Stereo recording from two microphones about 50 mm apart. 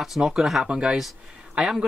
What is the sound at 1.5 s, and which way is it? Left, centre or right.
Speech, centre.